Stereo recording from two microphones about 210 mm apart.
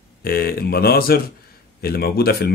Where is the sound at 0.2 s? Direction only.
45° left (ahead or behind).